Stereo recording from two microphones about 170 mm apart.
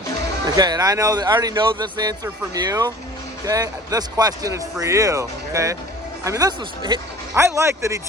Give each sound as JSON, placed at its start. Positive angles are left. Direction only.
{"t": 0.4, "sound": "speech", "side_deg": -25}